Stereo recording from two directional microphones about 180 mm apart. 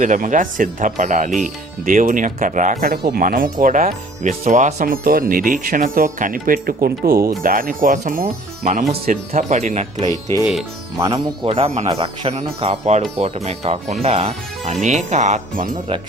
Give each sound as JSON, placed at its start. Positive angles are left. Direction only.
{"t": 0.0, "sound": "speech", "side_deg": -45}
{"t": 10.1, "sound": "music", "side_deg": 20}
{"t": 10.9, "sound": "speech", "side_deg": -20}
{"t": 11.4, "sound": "speech", "side_deg": -35}